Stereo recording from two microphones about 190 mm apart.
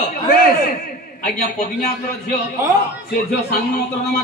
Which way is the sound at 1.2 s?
50° left (ahead or behind).